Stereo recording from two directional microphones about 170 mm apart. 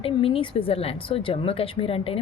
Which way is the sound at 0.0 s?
35° left (ahead or behind).